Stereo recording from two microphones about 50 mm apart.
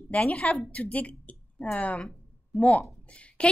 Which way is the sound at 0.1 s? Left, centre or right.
Left.